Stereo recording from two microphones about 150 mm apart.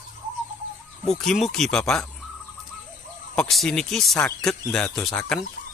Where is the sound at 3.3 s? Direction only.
Centre (ahead or behind).